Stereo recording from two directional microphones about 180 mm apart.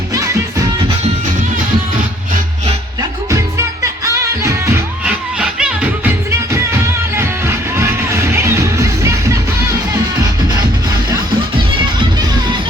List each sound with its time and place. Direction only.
0.1 s music: 15° right (ahead or behind)
4.0 s music: 15° right (ahead or behind)
7.2 s music: 15° right (ahead or behind)